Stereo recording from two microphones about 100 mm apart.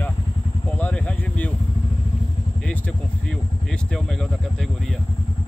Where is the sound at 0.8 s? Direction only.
15° left (ahead or behind).